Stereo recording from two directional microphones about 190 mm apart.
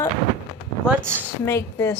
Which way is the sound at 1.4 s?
15° left (ahead or behind).